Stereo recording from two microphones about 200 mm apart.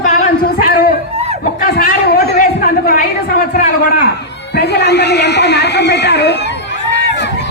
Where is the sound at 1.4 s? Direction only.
45° left (ahead or behind).